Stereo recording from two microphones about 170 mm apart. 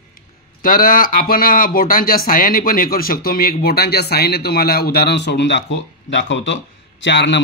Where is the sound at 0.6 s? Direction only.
55° left (ahead or behind).